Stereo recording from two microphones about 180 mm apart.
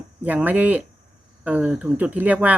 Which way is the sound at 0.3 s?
10° right (ahead or behind).